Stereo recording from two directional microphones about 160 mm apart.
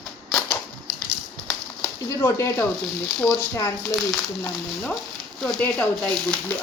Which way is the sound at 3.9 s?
Centre (ahead or behind).